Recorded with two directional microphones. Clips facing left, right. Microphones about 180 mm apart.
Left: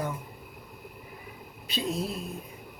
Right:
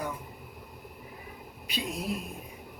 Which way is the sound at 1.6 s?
15° right (ahead or behind).